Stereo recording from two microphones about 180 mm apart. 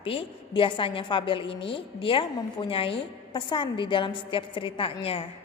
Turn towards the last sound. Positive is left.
turn(degrees=30)  # may be behind; listen again after turning